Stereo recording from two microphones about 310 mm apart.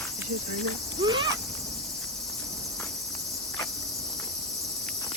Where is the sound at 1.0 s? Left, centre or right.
Centre.